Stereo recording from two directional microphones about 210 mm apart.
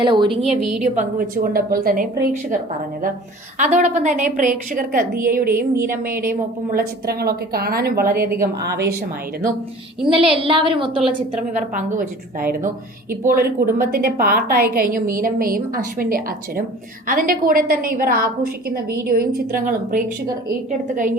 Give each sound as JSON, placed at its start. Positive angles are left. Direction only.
{"t": 0.0, "sound": "a woman's voice", "side_deg": -20}
{"t": 0.8, "sound": "a woman's voice", "side_deg": -40}
{"t": 3.6, "sound": "a woman's voice", "side_deg": -35}
{"t": 8.2, "sound": "a woman's voice", "side_deg": -10}
{"t": 8.8, "sound": "a woman's voice", "side_deg": -50}
{"t": 10.1, "sound": "a woman's voice", "side_deg": -25}
{"t": 11.5, "sound": "a woman's voice", "side_deg": -35}